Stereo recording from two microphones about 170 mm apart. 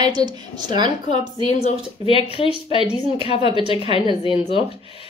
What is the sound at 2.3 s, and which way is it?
A woman's voice, 30° left (ahead or behind).